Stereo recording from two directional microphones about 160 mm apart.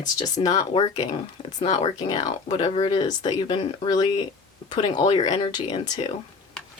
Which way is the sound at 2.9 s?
25° left (ahead or behind).